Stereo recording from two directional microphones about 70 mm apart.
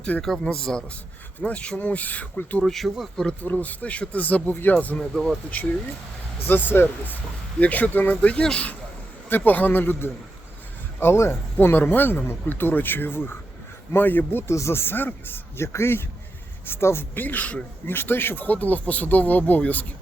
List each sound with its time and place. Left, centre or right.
0.2 s speech: centre
2.6 s speech: centre
3.4 s speech: left
5.1 s speech: centre
5.5 s speech: left
9.3 s speech: left
14.4 s speech: left
17.2 s speech: left